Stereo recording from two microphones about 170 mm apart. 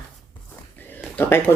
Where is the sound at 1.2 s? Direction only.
15° left (ahead or behind).